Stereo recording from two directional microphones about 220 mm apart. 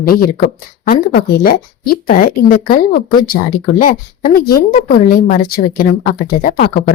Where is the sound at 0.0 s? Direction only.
40° left (ahead or behind).